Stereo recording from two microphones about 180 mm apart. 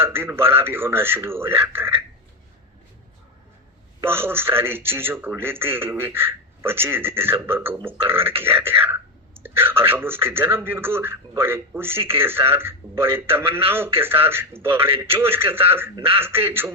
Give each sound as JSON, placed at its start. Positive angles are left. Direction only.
{"t": 0.0, "sound": "a man's voice", "side_deg": -10}
{"t": 4.0, "sound": "a man's voice", "side_deg": -10}
{"t": 8.4, "sound": "speech", "side_deg": -30}
{"t": 9.4, "sound": "a sound", "side_deg": -10}
{"t": 9.9, "sound": "a man's voice", "side_deg": -10}
{"t": 11.9, "sound": "speech", "side_deg": -30}
{"t": 12.5, "sound": "a man's voice", "side_deg": -15}
{"t": 14.9, "sound": "speech", "side_deg": -30}
{"t": 15.2, "sound": "a man's voice", "side_deg": -15}